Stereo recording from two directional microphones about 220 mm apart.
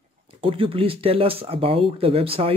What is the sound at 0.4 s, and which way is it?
Speech, 25° right (ahead or behind).